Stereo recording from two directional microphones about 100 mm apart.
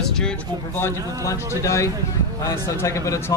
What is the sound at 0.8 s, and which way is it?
A man's voice, 30° left (ahead or behind).